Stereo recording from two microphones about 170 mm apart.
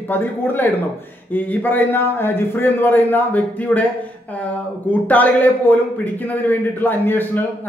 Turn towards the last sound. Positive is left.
turn(degrees=10)  # may be behind; listen again after turning